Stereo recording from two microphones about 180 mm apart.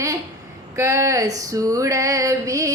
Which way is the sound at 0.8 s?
15° right (ahead or behind).